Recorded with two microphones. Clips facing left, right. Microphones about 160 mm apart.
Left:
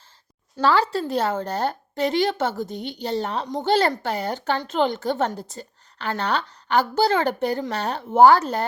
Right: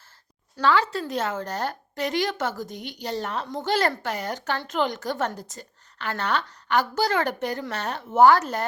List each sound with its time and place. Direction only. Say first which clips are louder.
0.6 s a woman's voice: left 2 dB; 35° left (ahead or behind)